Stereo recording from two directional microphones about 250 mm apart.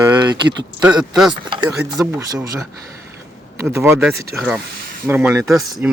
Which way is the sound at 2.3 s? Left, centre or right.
Centre.